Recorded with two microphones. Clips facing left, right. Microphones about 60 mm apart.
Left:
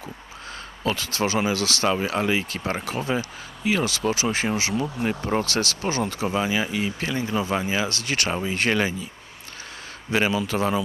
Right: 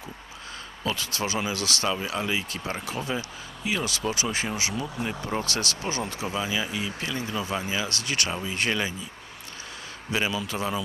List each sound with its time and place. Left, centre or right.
1.1 s speech: left
1.5 s speech: right
1.8 s speech: left
5.8 s speech: left
10.1 s speech: left